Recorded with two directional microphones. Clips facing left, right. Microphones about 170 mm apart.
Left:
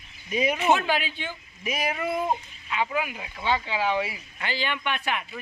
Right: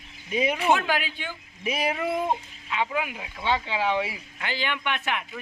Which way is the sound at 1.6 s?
30° right (ahead or behind).